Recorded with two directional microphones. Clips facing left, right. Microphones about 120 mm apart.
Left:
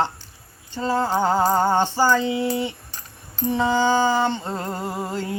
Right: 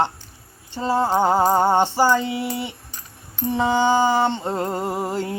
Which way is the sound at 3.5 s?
20° right (ahead or behind).